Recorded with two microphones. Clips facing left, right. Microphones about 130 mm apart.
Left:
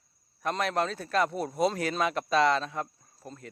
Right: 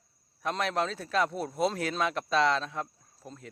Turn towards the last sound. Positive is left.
turn(degrees=0)  # may be behind; listen again after turning